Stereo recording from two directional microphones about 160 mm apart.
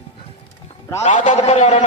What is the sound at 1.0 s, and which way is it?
Speech, 50° left (ahead or behind).